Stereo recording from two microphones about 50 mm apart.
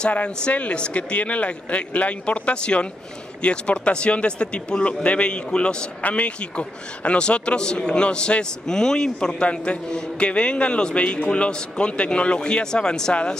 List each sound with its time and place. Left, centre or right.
0.4 s a man's voice: left